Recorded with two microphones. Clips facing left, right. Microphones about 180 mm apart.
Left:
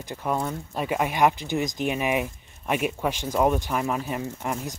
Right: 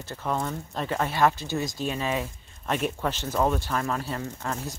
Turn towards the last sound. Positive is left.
turn(degrees=15)  # may be behind; listen again after turning